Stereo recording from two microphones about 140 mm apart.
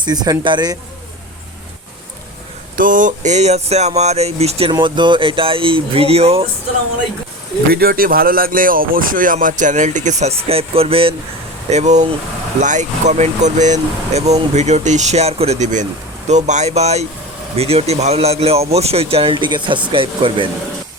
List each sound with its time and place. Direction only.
0.0 s speech: 30° right (ahead or behind)
2.7 s speech: 75° right (ahead or behind); by 4.7 s 45° right (ahead or behind)
4.7 s speech: 35° right (ahead or behind)
7.7 s speech: 90° right; by 11.1 s 45° right (ahead or behind)
11.7 s speech: 55° right (ahead or behind); by 20.5 s 40° right (ahead or behind)